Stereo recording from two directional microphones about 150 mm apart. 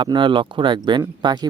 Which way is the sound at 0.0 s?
30° right (ahead or behind).